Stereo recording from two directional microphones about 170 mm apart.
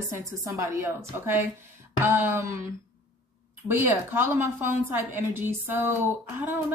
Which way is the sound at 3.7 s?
15° right (ahead or behind).